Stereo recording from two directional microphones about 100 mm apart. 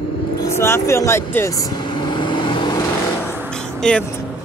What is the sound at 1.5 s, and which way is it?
Speech, 35° left (ahead or behind).